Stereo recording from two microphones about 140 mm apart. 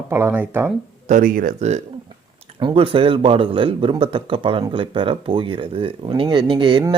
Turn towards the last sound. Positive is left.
turn(degrees=-35)  # may be behind; listen again after turning